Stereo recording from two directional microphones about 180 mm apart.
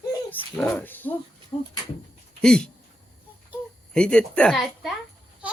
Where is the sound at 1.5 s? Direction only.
25° left (ahead or behind).